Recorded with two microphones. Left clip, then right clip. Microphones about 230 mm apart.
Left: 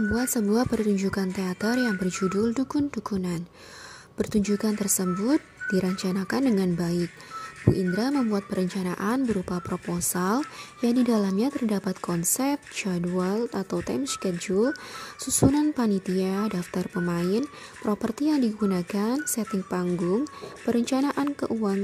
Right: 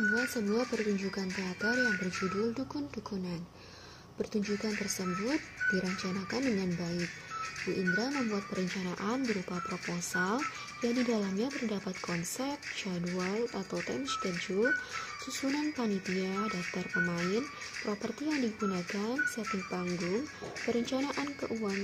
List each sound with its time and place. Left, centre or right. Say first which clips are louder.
0.1 s speech: left 5 dB; left